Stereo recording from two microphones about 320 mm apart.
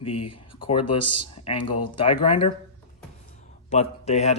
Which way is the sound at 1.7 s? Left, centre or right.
Left.